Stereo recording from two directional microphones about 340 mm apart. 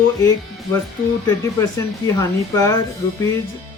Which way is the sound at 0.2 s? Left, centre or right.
Centre.